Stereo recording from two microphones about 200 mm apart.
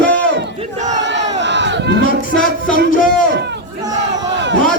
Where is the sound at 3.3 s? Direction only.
60° right (ahead or behind).